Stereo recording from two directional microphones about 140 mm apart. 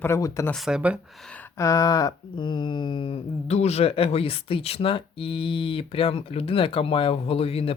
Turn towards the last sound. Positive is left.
turn(degrees=45)  # may be behind; listen again after turning